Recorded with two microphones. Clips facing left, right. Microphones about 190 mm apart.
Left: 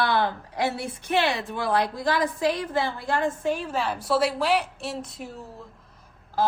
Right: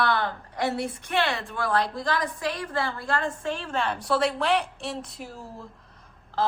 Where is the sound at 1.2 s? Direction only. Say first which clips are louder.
Left 1 dB; 20° left (ahead or behind).